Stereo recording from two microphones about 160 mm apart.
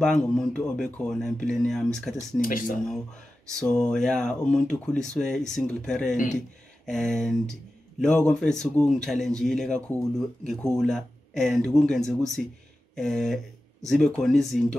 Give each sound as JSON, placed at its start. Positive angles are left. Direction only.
{"t": 0.0, "sound": "a man's voice", "side_deg": 5}
{"t": 2.4, "sound": "speech", "side_deg": 60}
{"t": 3.4, "sound": "a man's voice", "side_deg": 5}